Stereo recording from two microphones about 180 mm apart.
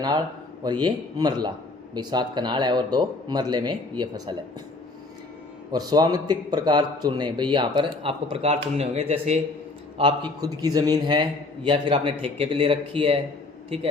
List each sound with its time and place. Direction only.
0.6 s a man's voice: 25° right (ahead or behind)
5.7 s a man's voice: 20° right (ahead or behind)
10.0 s a man's voice: 25° right (ahead or behind)